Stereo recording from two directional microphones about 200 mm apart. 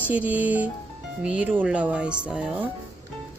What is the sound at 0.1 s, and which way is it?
Speech, 5° right (ahead or behind).